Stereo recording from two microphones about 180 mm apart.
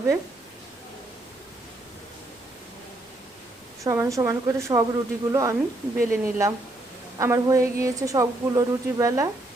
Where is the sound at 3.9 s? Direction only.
15° right (ahead or behind).